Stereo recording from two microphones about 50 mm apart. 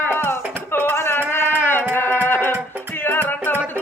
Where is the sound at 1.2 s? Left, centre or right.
Left.